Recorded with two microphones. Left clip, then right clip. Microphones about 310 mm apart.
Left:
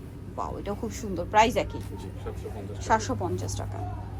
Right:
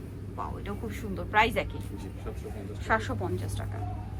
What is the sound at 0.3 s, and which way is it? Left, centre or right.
Speech, centre.